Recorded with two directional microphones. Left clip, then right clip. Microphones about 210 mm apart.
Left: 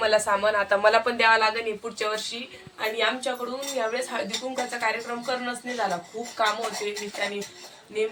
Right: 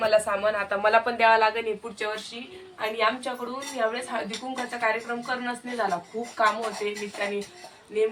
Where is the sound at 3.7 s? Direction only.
Centre (ahead or behind).